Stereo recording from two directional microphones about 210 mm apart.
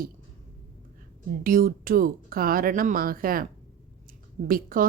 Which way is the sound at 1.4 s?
45° right (ahead or behind).